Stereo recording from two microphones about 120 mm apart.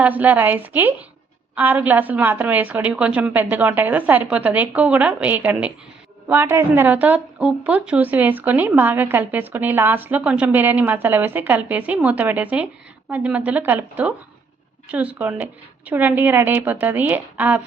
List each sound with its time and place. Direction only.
0.0 s speech: 15° right (ahead or behind)